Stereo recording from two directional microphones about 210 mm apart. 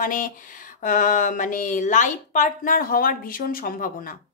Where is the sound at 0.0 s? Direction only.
40° left (ahead or behind).